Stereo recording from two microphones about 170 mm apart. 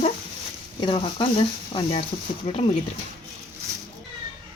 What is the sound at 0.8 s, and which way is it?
Speech, 30° left (ahead or behind).